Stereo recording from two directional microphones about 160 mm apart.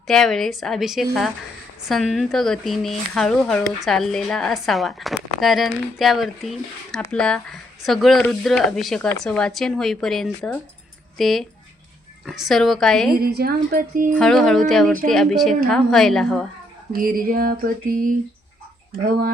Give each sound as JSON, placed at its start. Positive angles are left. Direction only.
{"t": 0.1, "sound": "speech", "side_deg": 0}
{"t": 13.2, "sound": "speech", "side_deg": -75}
{"t": 14.1, "sound": "speech", "side_deg": 5}
{"t": 16.9, "sound": "speech", "side_deg": -65}